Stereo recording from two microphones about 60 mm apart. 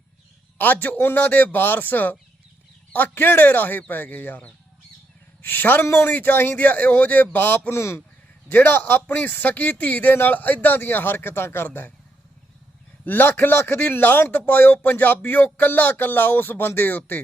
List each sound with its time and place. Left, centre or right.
0.6 s a man's voice: left
7.7 s speech: left
8.4 s a man's voice: left
13.1 s a man's voice: left